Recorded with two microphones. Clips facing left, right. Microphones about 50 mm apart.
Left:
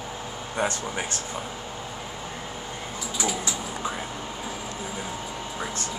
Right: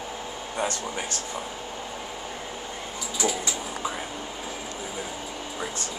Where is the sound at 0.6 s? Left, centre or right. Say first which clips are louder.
Left 2 dB; left.